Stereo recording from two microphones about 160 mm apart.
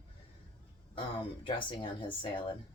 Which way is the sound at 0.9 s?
35° left (ahead or behind).